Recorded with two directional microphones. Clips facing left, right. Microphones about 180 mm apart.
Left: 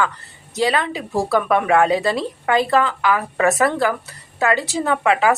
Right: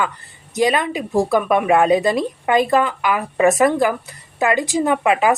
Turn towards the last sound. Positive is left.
turn(degrees=-15)  # may be behind; listen again after turning